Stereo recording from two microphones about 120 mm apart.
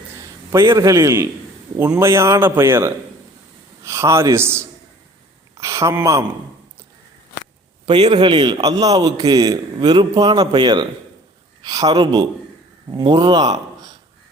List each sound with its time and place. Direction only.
0.5 s speech: 25° right (ahead or behind)
8.1 s a man's voice: 40° right (ahead or behind)